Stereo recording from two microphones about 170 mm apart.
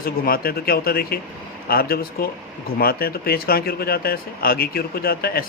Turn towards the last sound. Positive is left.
turn(degrees=65)  # may be behind; listen again after turning